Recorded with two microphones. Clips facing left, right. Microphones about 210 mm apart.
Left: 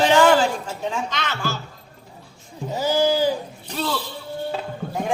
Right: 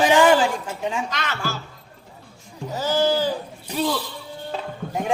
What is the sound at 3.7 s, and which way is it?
Speech, 10° right (ahead or behind).